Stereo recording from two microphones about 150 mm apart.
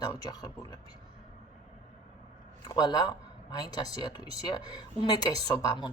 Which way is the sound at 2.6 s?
30° left (ahead or behind).